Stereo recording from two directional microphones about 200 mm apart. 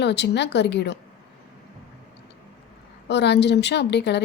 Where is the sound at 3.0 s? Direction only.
60° left (ahead or behind).